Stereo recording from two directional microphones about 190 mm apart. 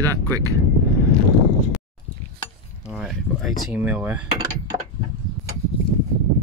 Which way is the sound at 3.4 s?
Centre (ahead or behind).